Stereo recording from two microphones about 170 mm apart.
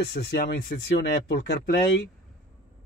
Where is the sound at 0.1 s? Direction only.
70° left (ahead or behind).